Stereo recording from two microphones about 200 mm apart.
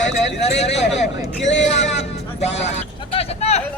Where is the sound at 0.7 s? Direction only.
60° left (ahead or behind).